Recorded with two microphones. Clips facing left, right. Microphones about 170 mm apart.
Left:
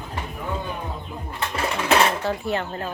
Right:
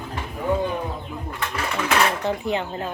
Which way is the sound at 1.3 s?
30° left (ahead or behind).